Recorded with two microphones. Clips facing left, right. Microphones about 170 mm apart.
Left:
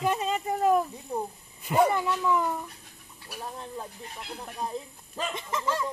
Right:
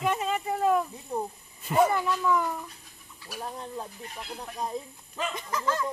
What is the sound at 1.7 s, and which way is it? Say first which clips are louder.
Speech: even; 20° left (ahead or behind).